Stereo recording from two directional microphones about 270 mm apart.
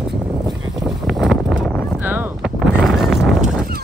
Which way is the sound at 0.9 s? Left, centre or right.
Centre.